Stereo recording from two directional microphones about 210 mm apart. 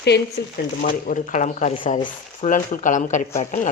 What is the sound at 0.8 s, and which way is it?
Speech, 40° left (ahead or behind).